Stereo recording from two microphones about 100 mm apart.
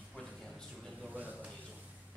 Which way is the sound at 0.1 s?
5° left (ahead or behind).